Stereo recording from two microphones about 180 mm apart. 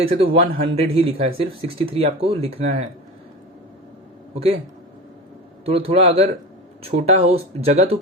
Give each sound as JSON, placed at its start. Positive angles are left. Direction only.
{"t": 0.0, "sound": "speech", "side_deg": -30}
{"t": 5.6, "sound": "speech", "side_deg": -30}